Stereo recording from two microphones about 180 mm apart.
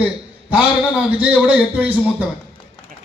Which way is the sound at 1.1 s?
10° right (ahead or behind).